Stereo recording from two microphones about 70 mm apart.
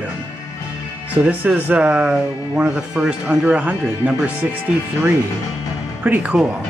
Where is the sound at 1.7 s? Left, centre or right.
Centre.